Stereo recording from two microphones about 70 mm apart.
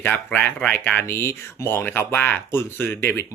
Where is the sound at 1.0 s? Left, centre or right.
Left.